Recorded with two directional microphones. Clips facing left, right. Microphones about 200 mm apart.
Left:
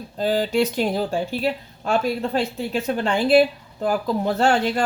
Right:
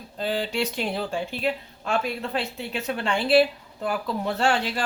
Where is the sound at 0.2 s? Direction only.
40° left (ahead or behind).